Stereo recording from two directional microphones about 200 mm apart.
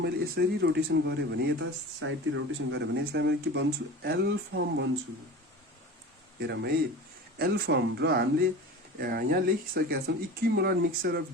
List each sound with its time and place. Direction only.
0.0 s speech: 55° right (ahead or behind)
2.0 s speech: 70° right (ahead or behind)
6.4 s speech: 55° right (ahead or behind)